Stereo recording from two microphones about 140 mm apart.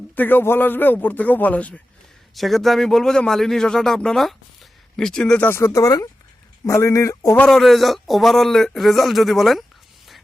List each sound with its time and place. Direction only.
0.2 s a man's voice: 15° left (ahead or behind)
7.3 s a man's voice: 5° left (ahead or behind)